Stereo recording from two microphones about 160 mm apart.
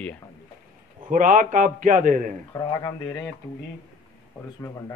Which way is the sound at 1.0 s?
55° right (ahead or behind).